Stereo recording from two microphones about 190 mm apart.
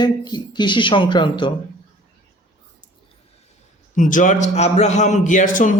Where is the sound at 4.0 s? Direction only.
40° left (ahead or behind).